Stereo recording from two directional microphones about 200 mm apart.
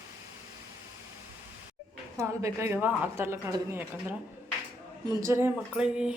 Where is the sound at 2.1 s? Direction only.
15° right (ahead or behind).